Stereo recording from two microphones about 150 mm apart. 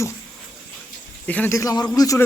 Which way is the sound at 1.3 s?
10° left (ahead or behind).